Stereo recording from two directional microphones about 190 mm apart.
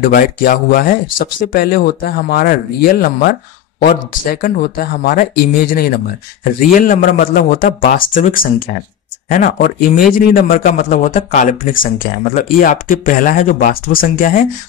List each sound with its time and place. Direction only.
0.1 s speech: 50° left (ahead or behind)